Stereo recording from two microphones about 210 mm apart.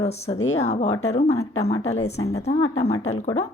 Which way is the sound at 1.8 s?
90° left.